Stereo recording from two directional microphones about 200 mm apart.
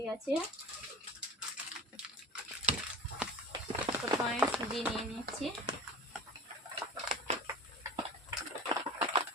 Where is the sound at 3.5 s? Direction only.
20° right (ahead or behind).